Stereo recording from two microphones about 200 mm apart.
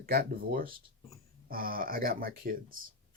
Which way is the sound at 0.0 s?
50° right (ahead or behind).